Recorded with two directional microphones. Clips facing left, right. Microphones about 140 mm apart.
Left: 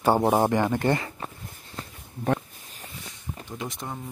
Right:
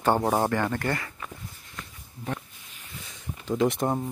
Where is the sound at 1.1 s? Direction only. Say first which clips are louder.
Left 2 dB; 35° left (ahead or behind).